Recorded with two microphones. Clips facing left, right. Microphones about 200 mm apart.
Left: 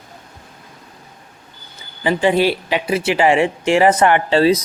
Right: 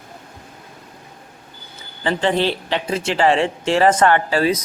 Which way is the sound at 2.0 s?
10° left (ahead or behind).